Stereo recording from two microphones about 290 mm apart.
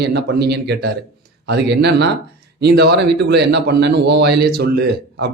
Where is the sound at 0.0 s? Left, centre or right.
Right.